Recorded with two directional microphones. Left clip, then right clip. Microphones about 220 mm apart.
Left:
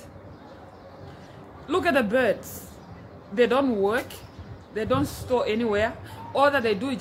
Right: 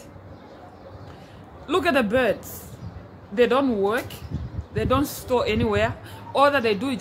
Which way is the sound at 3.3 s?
5° right (ahead or behind).